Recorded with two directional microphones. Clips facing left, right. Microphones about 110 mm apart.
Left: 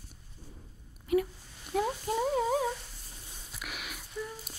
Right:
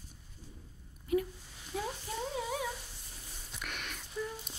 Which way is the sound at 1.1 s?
80° left.